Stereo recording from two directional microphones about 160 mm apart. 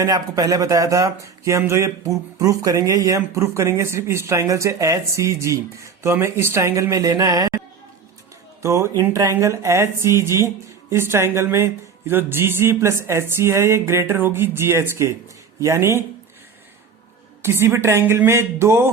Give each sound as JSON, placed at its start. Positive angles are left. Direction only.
{"t": 0.0, "sound": "speech", "side_deg": -20}
{"t": 8.6, "sound": "speech", "side_deg": -20}
{"t": 17.4, "sound": "speech", "side_deg": -15}